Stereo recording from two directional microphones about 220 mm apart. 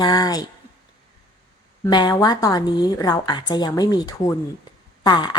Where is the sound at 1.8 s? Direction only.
20° left (ahead or behind).